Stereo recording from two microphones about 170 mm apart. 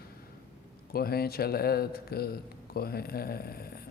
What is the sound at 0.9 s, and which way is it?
Speech, 65° left (ahead or behind).